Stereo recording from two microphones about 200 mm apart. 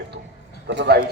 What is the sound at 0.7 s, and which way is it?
Speech, 60° right (ahead or behind).